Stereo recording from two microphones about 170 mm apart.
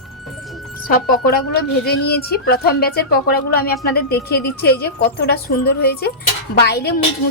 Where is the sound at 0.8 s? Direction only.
60° left (ahead or behind).